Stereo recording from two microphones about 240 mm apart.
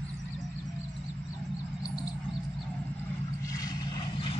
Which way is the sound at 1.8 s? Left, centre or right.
Centre.